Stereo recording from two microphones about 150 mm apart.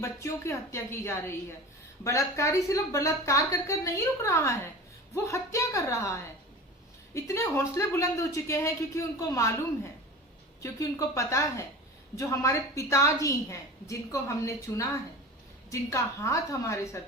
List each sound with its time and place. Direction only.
0.0 s a woman's voice: 20° left (ahead or behind)
10.6 s a woman's voice: 20° left (ahead or behind)